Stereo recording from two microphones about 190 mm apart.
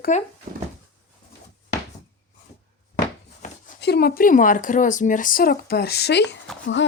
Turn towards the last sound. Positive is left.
turn(degrees=75)  # may be behind; listen again after turning